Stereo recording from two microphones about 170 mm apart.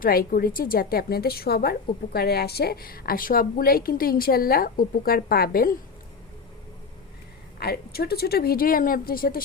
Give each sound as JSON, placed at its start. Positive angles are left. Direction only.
{"t": 0.0, "sound": "a woman's voice", "side_deg": 55}
{"t": 7.6, "sound": "a woman's voice", "side_deg": 65}